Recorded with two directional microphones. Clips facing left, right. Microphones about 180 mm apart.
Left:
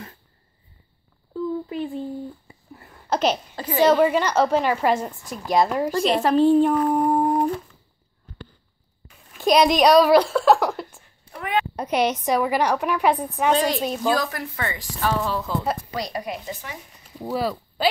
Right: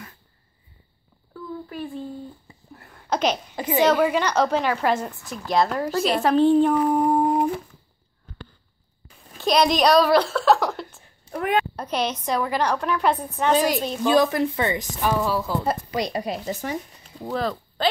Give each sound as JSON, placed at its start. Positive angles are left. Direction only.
{"t": 1.3, "sound": "a sound", "side_deg": 20}
{"t": 2.7, "sound": "a sound", "side_deg": 5}
{"t": 3.5, "sound": "a woman's voice", "side_deg": -20}
{"t": 4.0, "sound": "a woman's voice", "side_deg": 5}
{"t": 5.9, "sound": "speech", "side_deg": 0}
{"t": 7.3, "sound": "humming", "side_deg": -5}
{"t": 9.4, "sound": "a woman's voice", "side_deg": 10}
{"t": 10.3, "sound": "a sound", "side_deg": 5}
{"t": 11.3, "sound": "a child's voice", "side_deg": -45}
{"t": 11.7, "sound": "a woman's voice", "side_deg": 15}
{"t": 13.5, "sound": "a woman's voice", "side_deg": -5}
{"t": 14.0, "sound": "a woman's voice", "side_deg": -20}
{"t": 15.9, "sound": "a woman's voice", "side_deg": -20}
{"t": 17.2, "sound": "speech", "side_deg": 10}